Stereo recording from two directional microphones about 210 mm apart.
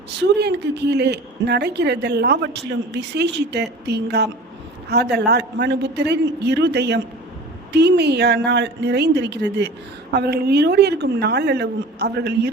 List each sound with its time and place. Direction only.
0.2 s a woman's voice: 50° right (ahead or behind)